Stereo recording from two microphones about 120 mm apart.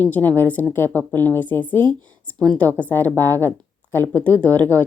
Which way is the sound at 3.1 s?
25° right (ahead or behind).